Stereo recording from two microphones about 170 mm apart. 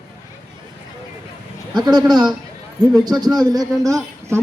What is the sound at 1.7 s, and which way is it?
Speech, 25° right (ahead or behind).